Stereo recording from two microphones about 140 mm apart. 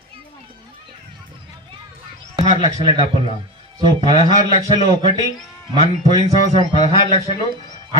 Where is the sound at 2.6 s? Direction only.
45° left (ahead or behind).